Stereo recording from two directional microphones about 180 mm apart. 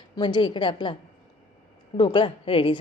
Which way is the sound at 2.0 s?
25° left (ahead or behind).